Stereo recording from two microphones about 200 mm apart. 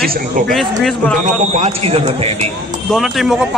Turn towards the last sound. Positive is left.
turn(degrees=0)  # may be behind; listen again after turning